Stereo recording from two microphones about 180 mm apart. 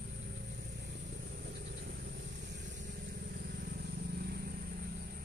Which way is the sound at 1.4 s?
60° right (ahead or behind).